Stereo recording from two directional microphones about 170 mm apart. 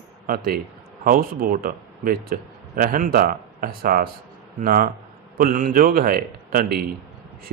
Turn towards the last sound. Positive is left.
turn(degrees=-55)  # may be behind; listen again after turning